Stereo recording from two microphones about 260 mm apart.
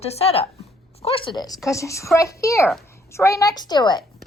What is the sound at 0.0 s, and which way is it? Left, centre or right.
A woman's voice, left.